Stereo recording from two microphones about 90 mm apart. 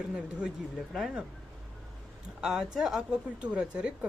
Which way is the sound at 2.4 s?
5° right (ahead or behind).